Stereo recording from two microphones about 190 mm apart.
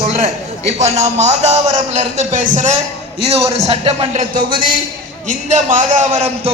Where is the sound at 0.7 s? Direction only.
35° right (ahead or behind).